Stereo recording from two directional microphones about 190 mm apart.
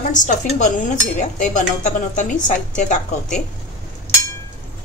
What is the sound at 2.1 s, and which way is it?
A woman's voice, 40° left (ahead or behind).